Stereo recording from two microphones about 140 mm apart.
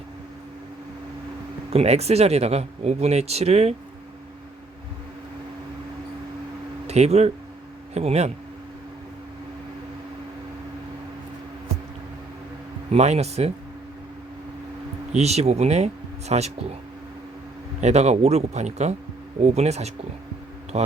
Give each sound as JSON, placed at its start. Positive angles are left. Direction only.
{"t": 1.7, "sound": "speech", "side_deg": -50}
{"t": 6.8, "sound": "speech", "side_deg": -50}
{"t": 12.9, "sound": "speech", "side_deg": -50}
{"t": 15.1, "sound": "speech", "side_deg": -50}
{"t": 17.7, "sound": "speech", "side_deg": -50}